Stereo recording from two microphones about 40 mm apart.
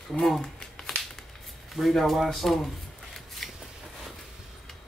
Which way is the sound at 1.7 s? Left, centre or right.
Centre.